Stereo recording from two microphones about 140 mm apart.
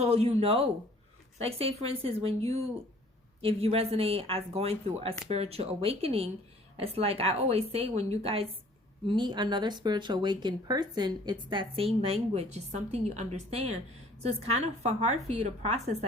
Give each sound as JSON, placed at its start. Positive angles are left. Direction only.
{"t": 0.0, "sound": "a woman's voice", "side_deg": -45}
{"t": 9.0, "sound": "a woman's voice", "side_deg": -35}